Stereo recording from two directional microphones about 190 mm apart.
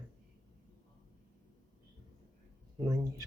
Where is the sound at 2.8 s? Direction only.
20° right (ahead or behind).